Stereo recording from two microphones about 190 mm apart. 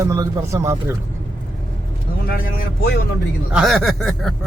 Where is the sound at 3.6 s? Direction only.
Centre (ahead or behind).